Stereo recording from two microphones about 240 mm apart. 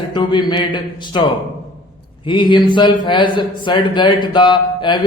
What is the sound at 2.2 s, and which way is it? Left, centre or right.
Speech, centre.